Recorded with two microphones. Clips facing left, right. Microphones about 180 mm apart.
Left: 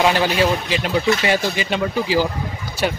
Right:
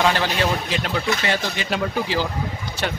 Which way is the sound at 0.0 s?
10° left (ahead or behind).